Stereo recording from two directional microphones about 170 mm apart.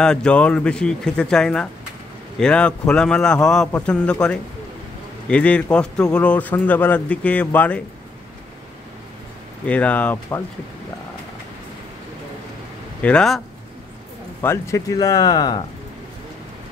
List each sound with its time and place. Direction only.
0.0 s a man's voice: 5° left (ahead or behind)
9.7 s a man's voice: 10° left (ahead or behind)
13.0 s speech: 5° left (ahead or behind)
14.4 s speech: 15° left (ahead or behind)